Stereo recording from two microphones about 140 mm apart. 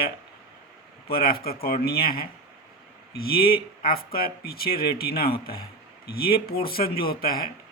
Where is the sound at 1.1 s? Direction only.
90° left.